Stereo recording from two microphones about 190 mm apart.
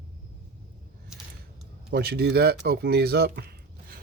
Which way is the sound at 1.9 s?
55° right (ahead or behind).